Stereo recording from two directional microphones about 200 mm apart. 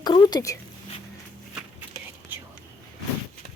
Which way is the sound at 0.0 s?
20° left (ahead or behind).